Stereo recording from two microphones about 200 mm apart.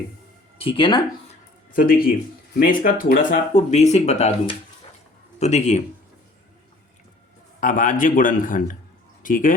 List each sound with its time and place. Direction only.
0.6 s speech: 25° left (ahead or behind)
1.7 s speech: 45° left (ahead or behind)
7.6 s speech: 40° left (ahead or behind)